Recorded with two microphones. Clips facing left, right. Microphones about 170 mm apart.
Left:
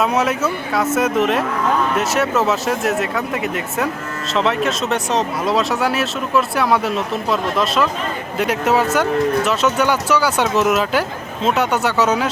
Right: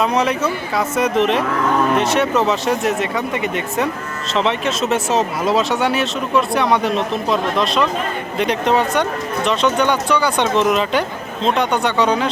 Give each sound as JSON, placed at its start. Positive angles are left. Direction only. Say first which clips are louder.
{"t": 0.0, "sound": "speech", "louder": "even", "side_deg": 5}